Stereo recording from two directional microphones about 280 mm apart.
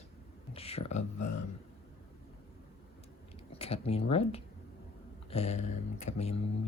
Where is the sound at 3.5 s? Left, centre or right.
Left.